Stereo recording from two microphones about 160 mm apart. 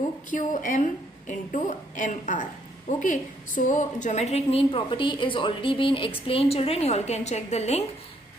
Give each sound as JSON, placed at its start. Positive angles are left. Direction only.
{"t": 0.3, "sound": "a woman's voice", "side_deg": 55}